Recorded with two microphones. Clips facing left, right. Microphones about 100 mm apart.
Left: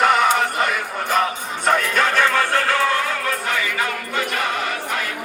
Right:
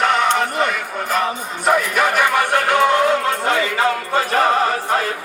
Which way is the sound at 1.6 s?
10° right (ahead or behind).